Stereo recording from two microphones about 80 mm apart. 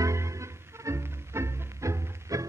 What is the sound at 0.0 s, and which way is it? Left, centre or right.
Music, right.